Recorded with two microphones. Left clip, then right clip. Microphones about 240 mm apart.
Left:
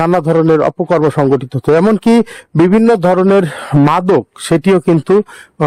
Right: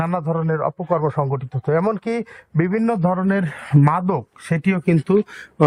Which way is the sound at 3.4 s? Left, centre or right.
Left.